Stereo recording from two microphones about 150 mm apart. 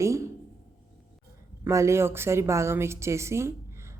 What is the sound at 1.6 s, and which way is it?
A woman's voice, 20° right (ahead or behind).